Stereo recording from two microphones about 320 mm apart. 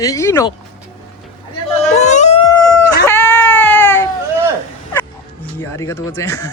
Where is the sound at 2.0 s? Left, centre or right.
Left.